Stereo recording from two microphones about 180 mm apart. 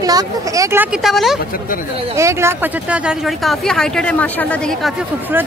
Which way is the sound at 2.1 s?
15° right (ahead or behind).